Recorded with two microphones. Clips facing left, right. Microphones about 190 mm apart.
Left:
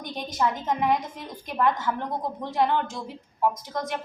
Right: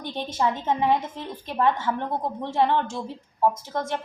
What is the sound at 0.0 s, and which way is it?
A woman's voice, 30° right (ahead or behind).